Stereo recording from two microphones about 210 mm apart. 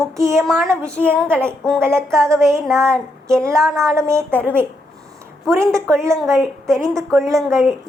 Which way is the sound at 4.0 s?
15° right (ahead or behind).